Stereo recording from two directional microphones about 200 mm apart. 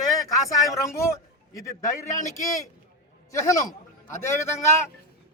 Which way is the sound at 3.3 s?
15° left (ahead or behind).